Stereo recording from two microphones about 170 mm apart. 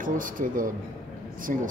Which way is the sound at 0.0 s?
50° right (ahead or behind).